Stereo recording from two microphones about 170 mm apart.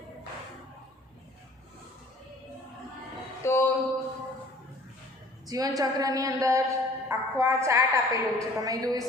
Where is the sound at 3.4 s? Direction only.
15° left (ahead or behind).